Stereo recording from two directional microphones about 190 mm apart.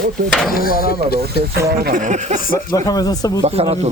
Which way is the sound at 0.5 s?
50° left (ahead or behind).